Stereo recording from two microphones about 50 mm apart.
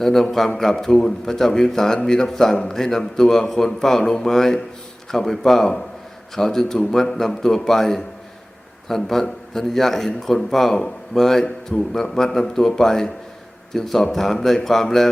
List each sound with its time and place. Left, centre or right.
0.0 s a man's voice: centre